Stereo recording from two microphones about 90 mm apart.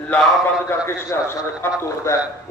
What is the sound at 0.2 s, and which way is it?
Speech, centre (ahead or behind).